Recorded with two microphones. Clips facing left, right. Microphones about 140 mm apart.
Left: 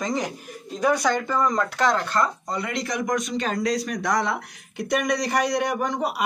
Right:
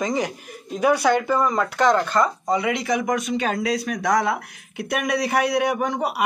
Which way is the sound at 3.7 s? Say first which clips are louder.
Right 3 dB; 55° right (ahead or behind).